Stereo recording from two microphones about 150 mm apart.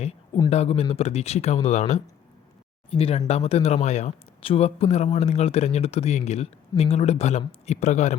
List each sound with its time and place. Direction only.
0.5 s speech: 45° left (ahead or behind)